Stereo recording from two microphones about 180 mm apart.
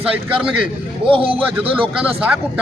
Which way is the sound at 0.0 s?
5° right (ahead or behind).